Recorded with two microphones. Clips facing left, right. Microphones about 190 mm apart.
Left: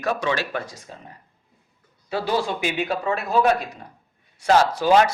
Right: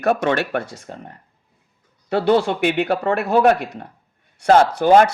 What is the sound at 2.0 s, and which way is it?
A man's voice, 60° right (ahead or behind).